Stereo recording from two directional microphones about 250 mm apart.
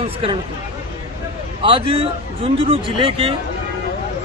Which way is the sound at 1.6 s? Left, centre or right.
Right.